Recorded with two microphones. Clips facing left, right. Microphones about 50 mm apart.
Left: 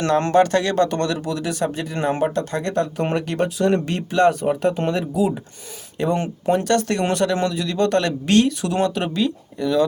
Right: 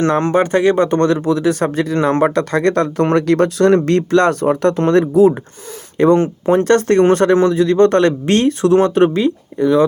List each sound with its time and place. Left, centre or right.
0.0 s speech: right
6.5 s speech: right